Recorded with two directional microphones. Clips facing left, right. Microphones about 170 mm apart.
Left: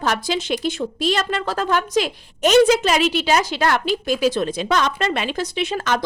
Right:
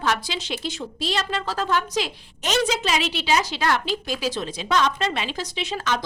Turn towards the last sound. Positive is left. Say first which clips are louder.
# left 5 dB
turn(degrees=50)  # may be behind; listen again after turning